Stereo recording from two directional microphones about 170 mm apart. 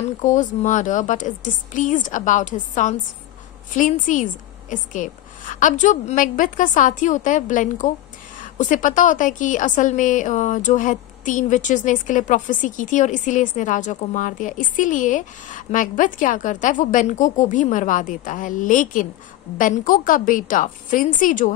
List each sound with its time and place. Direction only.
0.2 s a woman's voice: 45° left (ahead or behind)